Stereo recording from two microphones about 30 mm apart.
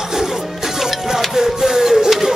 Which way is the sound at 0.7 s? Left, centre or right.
Centre.